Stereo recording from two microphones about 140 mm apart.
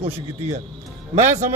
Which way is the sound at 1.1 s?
60° right (ahead or behind).